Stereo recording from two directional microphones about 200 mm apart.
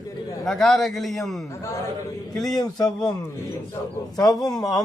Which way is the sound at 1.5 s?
15° left (ahead or behind).